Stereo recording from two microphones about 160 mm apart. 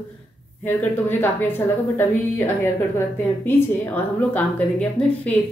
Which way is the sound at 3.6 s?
10° left (ahead or behind).